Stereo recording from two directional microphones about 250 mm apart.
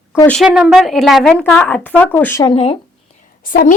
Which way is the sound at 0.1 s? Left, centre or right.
Centre.